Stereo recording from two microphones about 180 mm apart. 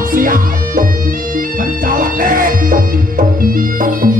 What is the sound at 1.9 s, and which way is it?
Music, 50° right (ahead or behind).